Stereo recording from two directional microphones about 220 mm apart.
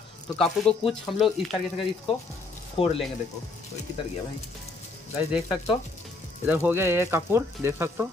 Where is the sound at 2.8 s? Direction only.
25° left (ahead or behind).